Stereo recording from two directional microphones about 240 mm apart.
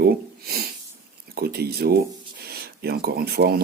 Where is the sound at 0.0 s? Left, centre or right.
Right.